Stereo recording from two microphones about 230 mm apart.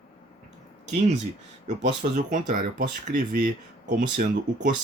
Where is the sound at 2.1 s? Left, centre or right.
Right.